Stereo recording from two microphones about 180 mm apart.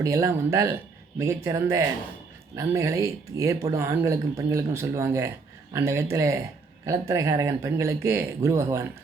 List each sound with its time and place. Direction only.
0.0 s speech: 15° right (ahead or behind)